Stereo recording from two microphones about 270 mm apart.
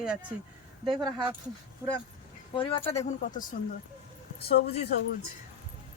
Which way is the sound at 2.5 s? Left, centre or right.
Centre.